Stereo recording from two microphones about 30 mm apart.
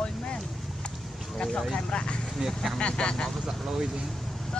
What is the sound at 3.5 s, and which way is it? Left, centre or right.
Speech, right.